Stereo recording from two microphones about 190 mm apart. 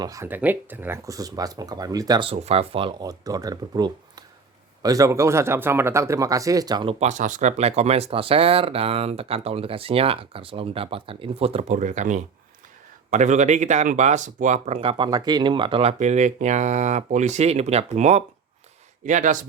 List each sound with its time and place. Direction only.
0.0 s speech: 15° right (ahead or behind)
7.0 s speech: 40° right (ahead or behind)